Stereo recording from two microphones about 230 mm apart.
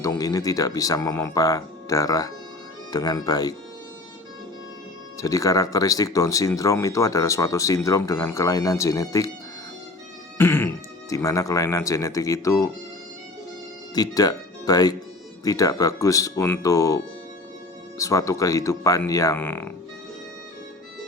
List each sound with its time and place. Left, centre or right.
0.0 s speech: centre
5.1 s speech: centre
10.3 s music: centre
11.1 s speech: centre
13.9 s speech: centre